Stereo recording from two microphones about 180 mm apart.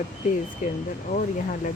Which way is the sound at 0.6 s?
45° left (ahead or behind).